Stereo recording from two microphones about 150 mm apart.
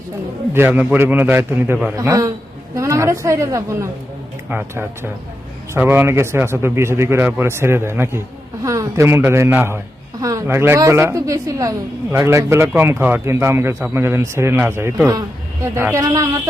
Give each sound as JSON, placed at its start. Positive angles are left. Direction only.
{"t": 0.5, "sound": "a man's voice", "side_deg": -15}